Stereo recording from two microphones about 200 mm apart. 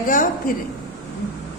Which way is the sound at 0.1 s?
45° left (ahead or behind).